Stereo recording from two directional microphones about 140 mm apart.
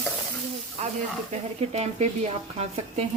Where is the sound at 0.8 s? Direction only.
55° right (ahead or behind).